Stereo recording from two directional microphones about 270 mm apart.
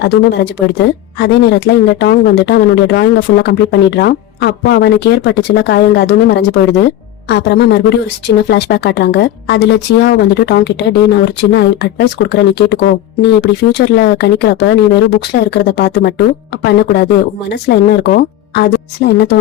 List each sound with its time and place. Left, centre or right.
0.0 s speech: left